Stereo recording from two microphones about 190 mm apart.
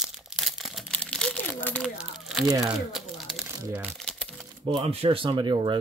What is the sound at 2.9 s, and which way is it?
Crumpling, centre (ahead or behind).